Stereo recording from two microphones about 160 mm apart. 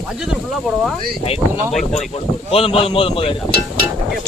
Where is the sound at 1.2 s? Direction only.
35° left (ahead or behind).